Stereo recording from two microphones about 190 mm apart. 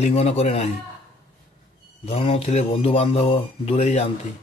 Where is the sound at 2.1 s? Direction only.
30° left (ahead or behind).